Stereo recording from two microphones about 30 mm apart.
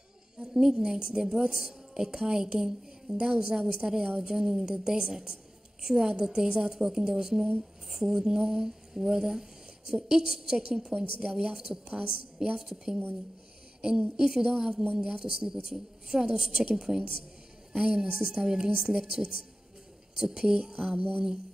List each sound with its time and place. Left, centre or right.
0.4 s a woman's voice: right
11.9 s a woman's voice: right
12.5 s a woman's voice: centre
13.7 s a woman's voice: right
20.6 s a woman's voice: right